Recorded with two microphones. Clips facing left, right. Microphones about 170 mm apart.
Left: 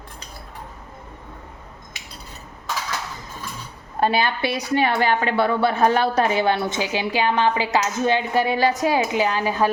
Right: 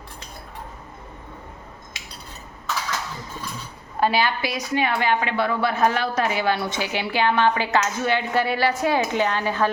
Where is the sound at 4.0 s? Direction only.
25° left (ahead or behind).